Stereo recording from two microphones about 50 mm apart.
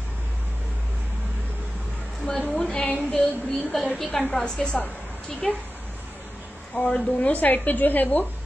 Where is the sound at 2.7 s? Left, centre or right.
Left.